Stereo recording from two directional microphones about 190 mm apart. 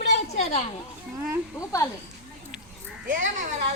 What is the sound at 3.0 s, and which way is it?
Speech, 45° right (ahead or behind).